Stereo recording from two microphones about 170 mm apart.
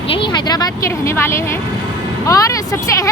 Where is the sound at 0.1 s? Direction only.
30° left (ahead or behind).